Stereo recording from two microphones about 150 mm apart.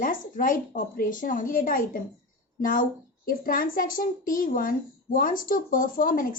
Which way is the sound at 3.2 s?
70° left (ahead or behind).